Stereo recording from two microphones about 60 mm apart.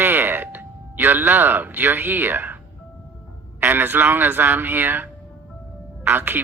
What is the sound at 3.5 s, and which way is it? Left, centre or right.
Speech, right.